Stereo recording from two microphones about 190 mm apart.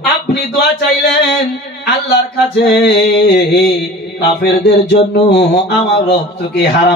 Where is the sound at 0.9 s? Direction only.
55° left (ahead or behind).